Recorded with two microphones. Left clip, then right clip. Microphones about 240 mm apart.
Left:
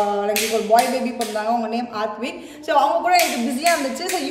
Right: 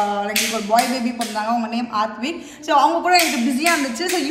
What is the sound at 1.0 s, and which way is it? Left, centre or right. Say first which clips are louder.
A woman's voice: even; centre.